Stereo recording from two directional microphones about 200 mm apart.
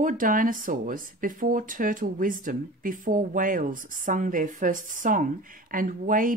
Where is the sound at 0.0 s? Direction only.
45° right (ahead or behind).